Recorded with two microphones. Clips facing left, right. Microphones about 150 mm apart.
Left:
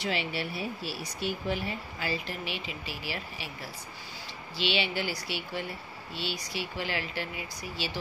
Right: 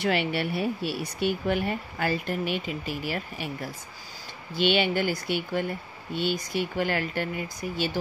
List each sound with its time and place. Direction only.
0.0 s speech: 60° right (ahead or behind)